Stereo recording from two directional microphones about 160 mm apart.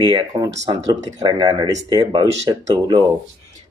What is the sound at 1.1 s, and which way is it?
Speech, 35° right (ahead or behind).